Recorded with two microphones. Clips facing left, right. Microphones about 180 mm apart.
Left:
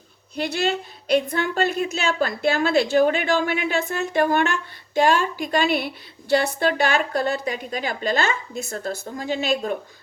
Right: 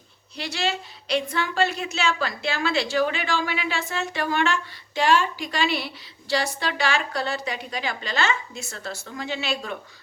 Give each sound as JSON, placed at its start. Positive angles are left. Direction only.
{"t": 0.4, "sound": "a woman's voice", "side_deg": 50}